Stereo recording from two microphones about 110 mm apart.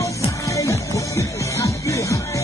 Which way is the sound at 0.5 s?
30° left (ahead or behind).